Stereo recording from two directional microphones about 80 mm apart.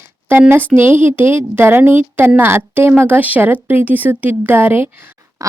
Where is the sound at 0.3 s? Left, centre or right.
Right.